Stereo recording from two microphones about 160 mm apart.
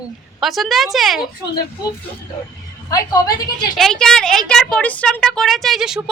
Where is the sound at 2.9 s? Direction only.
20° left (ahead or behind).